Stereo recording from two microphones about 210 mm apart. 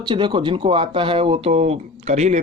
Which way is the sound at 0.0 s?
20° right (ahead or behind).